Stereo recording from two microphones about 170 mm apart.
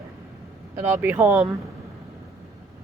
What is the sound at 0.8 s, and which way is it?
Speech, 15° right (ahead or behind).